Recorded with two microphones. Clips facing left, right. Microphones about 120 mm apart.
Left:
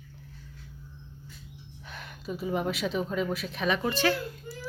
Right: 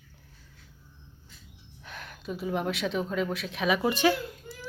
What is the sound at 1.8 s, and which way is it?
Speech, centre (ahead or behind).